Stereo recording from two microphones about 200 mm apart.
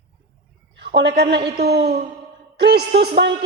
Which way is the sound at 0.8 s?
55° right (ahead or behind).